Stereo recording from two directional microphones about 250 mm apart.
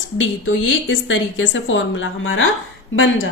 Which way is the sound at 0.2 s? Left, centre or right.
Left.